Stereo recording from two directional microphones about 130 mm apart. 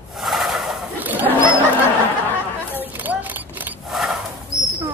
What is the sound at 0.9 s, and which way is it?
Bird, 15° right (ahead or behind).